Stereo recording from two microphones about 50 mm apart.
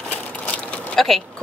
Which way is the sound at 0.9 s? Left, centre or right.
Centre.